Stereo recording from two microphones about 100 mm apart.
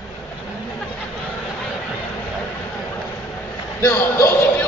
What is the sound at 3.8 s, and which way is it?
Speech, 20° left (ahead or behind).